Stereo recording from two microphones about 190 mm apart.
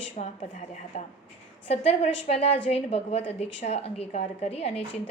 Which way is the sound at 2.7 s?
35° left (ahead or behind).